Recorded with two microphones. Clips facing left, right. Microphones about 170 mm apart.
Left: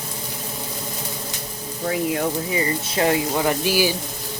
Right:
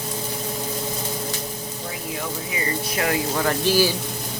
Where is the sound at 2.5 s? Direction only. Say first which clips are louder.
Left 3 dB; 30° left (ahead or behind).